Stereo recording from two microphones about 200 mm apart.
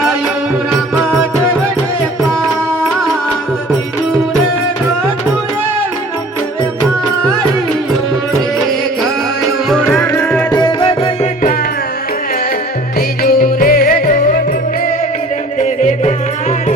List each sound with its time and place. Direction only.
9.6 s music: 5° left (ahead or behind)
10.5 s music: 20° left (ahead or behind)
13.2 s music: 50° left (ahead or behind)